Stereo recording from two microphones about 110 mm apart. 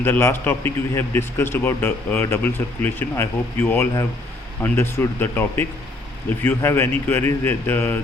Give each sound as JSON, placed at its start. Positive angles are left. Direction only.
{"t": 0.0, "sound": "a man's voice", "side_deg": 20}